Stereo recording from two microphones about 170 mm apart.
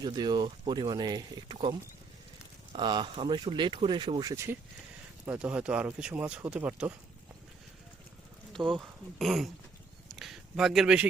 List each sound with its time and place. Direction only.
0.0 s speech: 25° right (ahead or behind)
2.7 s speech: 25° right (ahead or behind)
5.2 s speech: 10° right (ahead or behind)
8.6 s speech: 10° right (ahead or behind)
9.1 s dog: centre (ahead or behind)
10.1 s a sound: centre (ahead or behind)